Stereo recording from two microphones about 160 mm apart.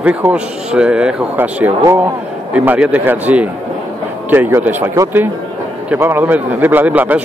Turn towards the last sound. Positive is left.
turn(degrees=-10)  # may be behind; listen again after turning